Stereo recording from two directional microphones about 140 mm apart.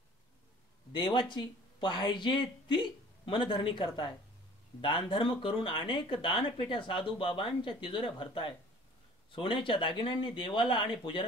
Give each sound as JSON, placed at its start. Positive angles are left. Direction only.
{"t": 0.9, "sound": "speech", "side_deg": 35}
{"t": 9.3, "sound": "speech", "side_deg": 40}